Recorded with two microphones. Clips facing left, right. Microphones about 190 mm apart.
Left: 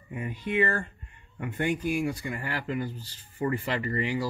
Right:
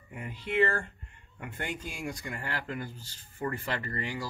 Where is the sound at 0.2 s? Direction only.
15° left (ahead or behind).